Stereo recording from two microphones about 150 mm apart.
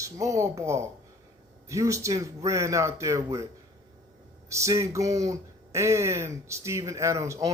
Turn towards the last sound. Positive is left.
turn(degrees=-20)  # may be behind; listen again after turning